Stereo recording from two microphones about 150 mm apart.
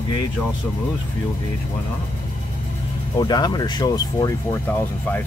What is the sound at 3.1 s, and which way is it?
Speech, 30° left (ahead or behind).